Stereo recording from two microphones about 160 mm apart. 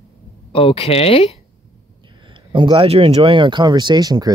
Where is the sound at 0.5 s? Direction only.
35° left (ahead or behind).